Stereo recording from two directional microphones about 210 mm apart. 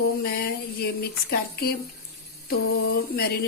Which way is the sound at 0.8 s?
50° left (ahead or behind).